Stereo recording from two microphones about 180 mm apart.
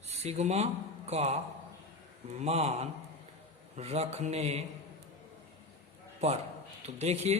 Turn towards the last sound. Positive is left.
turn(degrees=-35)  # may be behind; listen again after turning